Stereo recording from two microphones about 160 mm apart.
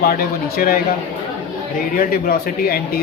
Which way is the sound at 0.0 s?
65° left (ahead or behind).